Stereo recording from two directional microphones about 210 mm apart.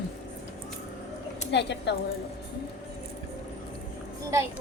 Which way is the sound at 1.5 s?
55° left (ahead or behind).